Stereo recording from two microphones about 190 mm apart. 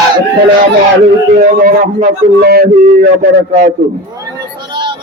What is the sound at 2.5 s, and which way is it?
A man's voice, 50° right (ahead or behind).